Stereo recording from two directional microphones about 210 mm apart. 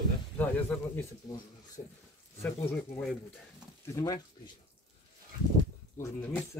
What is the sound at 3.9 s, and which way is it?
Speech, 15° left (ahead or behind).